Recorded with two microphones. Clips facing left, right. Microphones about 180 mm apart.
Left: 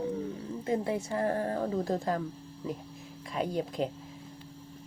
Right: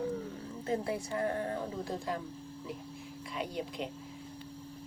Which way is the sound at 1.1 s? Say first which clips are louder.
Left 3 dB; 35° left (ahead or behind).